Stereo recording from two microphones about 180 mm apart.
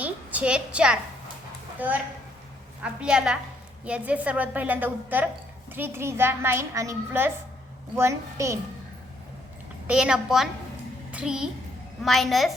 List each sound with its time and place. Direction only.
0.0 s a sound: 10° right (ahead or behind)
2.8 s a woman's voice: 5° right (ahead or behind)
9.8 s a woman's voice: 5° right (ahead or behind)